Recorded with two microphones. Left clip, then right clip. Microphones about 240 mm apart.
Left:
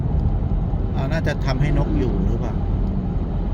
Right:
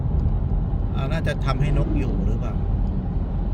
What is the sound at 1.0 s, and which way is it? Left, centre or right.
Vehicle, centre.